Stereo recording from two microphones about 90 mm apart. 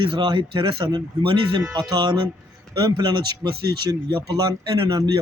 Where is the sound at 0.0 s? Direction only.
65° right (ahead or behind).